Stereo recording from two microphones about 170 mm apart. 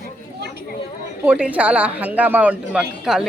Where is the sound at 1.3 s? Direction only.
5° right (ahead or behind).